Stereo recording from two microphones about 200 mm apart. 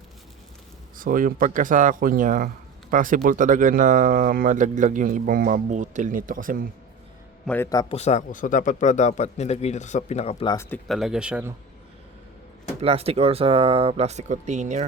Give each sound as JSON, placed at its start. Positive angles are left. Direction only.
{"t": 0.9, "sound": "speech", "side_deg": -45}
{"t": 7.4, "sound": "a man's voice", "side_deg": 10}
{"t": 7.9, "sound": "speech", "side_deg": 35}
{"t": 10.7, "sound": "speech", "side_deg": 0}
{"t": 12.8, "sound": "speech", "side_deg": -30}